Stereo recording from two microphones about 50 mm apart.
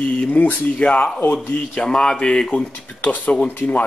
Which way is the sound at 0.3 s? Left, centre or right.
Left.